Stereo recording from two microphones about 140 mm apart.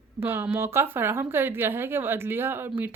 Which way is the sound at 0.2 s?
15° right (ahead or behind).